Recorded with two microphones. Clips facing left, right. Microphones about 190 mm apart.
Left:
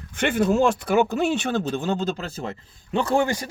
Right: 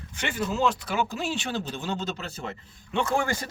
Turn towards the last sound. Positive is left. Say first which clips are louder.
# left 5 dB
turn(degrees=30)  # may be behind; listen again after turning